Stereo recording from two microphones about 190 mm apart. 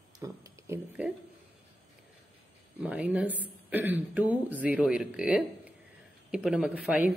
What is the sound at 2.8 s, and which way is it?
Speech, 10° right (ahead or behind).